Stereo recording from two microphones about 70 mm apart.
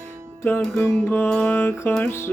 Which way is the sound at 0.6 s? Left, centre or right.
Centre.